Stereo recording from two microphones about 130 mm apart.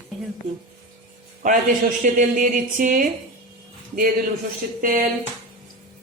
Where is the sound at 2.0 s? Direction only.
75° right (ahead or behind).